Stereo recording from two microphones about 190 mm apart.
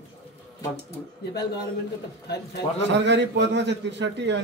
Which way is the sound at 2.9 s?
65° right (ahead or behind).